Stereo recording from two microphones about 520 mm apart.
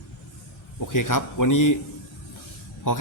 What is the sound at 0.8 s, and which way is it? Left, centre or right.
A man's voice, left.